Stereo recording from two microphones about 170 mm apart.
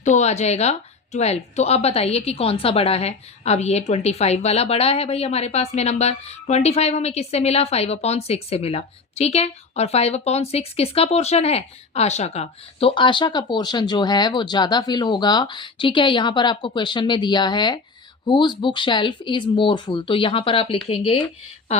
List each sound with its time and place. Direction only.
0.0 s speech: 45° left (ahead or behind)